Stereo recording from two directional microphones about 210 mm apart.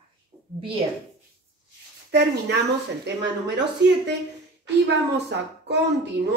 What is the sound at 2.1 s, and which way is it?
A woman's voice, 55° right (ahead or behind).